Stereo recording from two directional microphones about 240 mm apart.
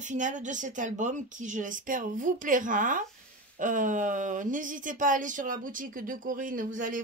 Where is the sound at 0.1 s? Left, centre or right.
Right.